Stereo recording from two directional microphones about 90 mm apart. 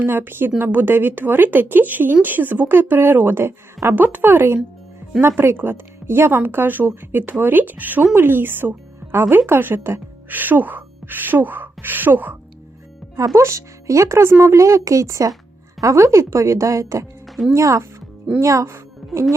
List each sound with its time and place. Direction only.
0.0 s a woman's voice: 25° right (ahead or behind)
13.1 s speech: 35° right (ahead or behind)
17.2 s music: centre (ahead or behind)
17.5 s speech: 35° right (ahead or behind)